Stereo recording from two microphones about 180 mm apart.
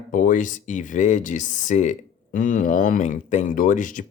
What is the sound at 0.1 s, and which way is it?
Speech, 45° left (ahead or behind).